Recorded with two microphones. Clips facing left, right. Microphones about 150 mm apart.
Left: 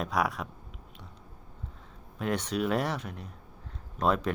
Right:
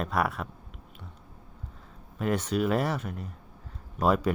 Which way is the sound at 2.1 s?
5° right (ahead or behind).